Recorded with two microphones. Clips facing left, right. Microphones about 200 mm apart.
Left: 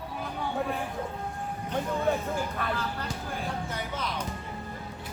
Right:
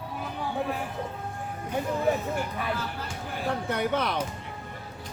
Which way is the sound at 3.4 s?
65° right (ahead or behind).